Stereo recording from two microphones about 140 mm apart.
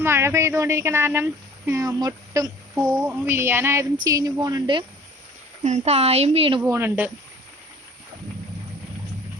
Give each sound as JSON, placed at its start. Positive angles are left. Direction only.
{"t": 0.0, "sound": "speech", "side_deg": -15}
{"t": 5.6, "sound": "speech", "side_deg": -50}
{"t": 6.6, "sound": "a woman's voice", "side_deg": -15}